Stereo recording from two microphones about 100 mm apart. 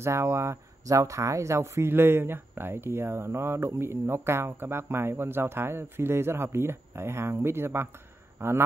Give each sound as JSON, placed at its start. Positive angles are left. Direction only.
{"t": 0.0, "sound": "a man's voice", "side_deg": -25}